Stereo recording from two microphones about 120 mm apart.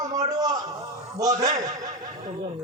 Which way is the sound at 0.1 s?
35° right (ahead or behind).